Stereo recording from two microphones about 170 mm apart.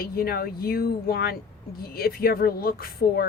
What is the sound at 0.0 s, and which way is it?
Speech, 65° left (ahead or behind).